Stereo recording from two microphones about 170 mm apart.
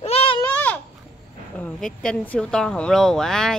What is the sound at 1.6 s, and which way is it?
A woman's voice, 5° left (ahead or behind).